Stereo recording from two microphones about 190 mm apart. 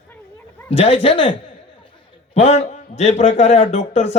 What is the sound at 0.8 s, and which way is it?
A man's voice, 30° left (ahead or behind).